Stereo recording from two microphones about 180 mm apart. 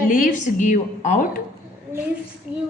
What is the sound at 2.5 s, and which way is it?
Female singing, 10° right (ahead or behind).